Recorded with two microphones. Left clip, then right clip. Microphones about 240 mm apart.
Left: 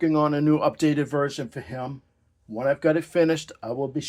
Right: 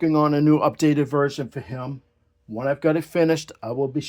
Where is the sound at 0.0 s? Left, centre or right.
Right.